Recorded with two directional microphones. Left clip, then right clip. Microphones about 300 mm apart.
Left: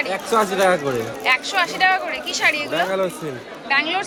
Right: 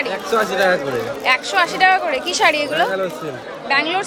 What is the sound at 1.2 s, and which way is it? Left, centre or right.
Speech, centre.